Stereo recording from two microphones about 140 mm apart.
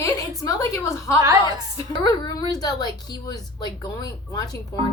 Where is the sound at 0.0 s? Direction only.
25° left (ahead or behind).